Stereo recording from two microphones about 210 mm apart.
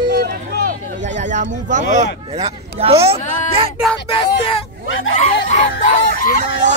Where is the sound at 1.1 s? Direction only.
35° right (ahead or behind).